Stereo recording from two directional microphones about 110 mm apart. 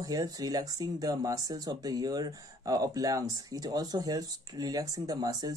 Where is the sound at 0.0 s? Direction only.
35° right (ahead or behind).